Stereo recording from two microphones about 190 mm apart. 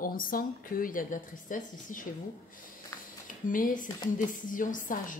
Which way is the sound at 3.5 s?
45° left (ahead or behind).